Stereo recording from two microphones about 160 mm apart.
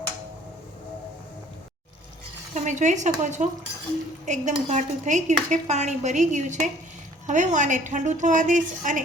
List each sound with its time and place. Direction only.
2.6 s dishes: 50° right (ahead or behind)